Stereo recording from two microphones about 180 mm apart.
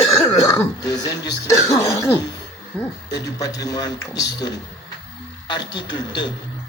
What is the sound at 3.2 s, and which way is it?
Speech, 20° left (ahead or behind).